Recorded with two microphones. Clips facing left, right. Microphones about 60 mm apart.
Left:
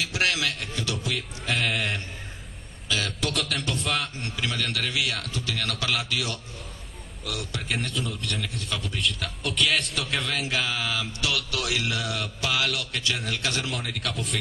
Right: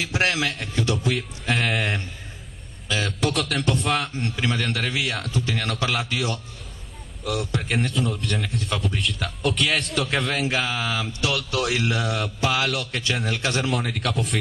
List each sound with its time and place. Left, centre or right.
0.0 s speech: right
0.9 s a man's voice: centre
1.8 s speech: right
3.1 s a man's voice: centre
4.2 s speech: right
7.7 s a man's voice: centre
10.5 s speech: right
13.7 s a man's voice: centre